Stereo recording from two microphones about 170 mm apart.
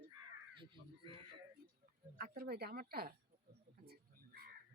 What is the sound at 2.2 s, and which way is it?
Speech, 65° right (ahead or behind).